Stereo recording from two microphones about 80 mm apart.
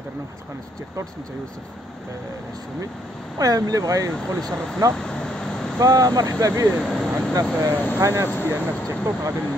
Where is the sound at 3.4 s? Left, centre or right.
Right.